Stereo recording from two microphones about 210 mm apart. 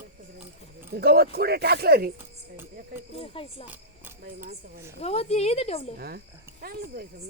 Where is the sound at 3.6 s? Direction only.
10° right (ahead or behind).